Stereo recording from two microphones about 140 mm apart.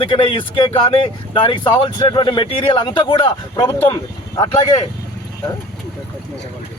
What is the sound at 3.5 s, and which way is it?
Speech, 25° left (ahead or behind).